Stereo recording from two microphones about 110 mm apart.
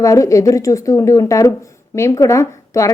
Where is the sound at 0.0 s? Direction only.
30° left (ahead or behind).